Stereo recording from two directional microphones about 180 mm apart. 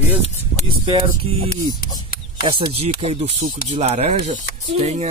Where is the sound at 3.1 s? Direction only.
35° right (ahead or behind).